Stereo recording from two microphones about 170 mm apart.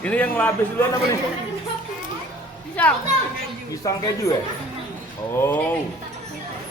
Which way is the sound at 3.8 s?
20° left (ahead or behind).